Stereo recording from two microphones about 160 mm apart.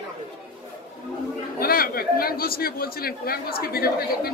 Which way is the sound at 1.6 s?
70° left (ahead or behind).